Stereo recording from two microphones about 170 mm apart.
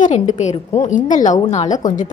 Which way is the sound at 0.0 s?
45° left (ahead or behind).